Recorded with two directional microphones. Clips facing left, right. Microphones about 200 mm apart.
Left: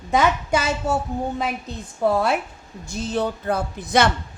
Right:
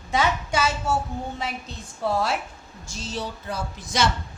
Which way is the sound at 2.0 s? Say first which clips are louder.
Left 5 dB; 60° left (ahead or behind).